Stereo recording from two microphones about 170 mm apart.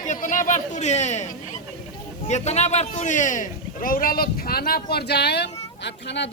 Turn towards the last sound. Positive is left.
turn(degrees=90)